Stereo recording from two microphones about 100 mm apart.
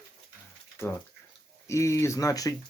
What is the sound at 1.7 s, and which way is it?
Speech, 30° left (ahead or behind).